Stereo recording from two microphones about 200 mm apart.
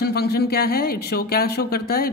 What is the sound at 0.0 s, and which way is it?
Speech, 50° left (ahead or behind).